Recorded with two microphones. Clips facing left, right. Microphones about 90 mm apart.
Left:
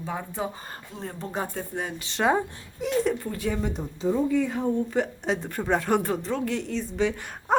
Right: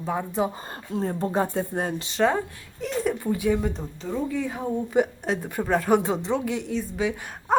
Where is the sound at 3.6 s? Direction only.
10° left (ahead or behind).